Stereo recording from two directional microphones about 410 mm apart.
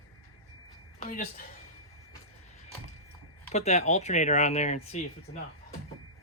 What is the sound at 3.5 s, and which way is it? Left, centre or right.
Speech, centre.